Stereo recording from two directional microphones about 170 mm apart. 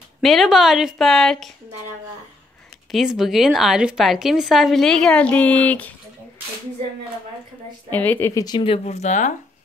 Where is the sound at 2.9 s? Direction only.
Centre (ahead or behind).